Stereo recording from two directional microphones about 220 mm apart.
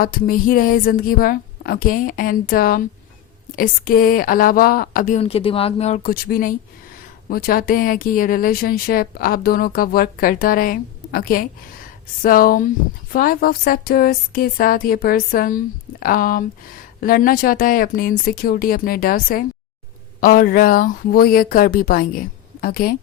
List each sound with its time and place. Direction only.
0.0 s speech: 40° left (ahead or behind)